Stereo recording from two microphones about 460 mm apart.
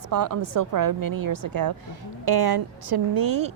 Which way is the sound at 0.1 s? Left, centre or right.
Right.